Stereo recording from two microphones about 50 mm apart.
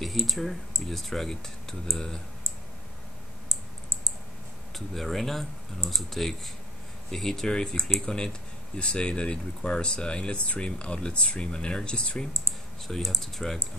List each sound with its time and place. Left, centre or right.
0.0 s speech: centre
3.4 s typing: right
4.7 s speech: centre; by 12.3 s left
12.8 s speech: centre